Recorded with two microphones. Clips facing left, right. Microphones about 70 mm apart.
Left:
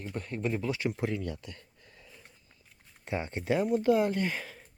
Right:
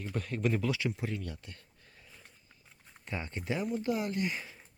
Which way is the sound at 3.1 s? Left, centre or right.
Left.